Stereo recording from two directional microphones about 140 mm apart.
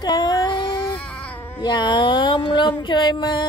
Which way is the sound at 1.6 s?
35° left (ahead or behind).